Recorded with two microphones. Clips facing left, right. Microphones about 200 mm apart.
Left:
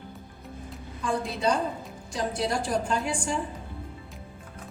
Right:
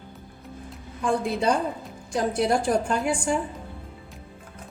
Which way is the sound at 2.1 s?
55° right (ahead or behind).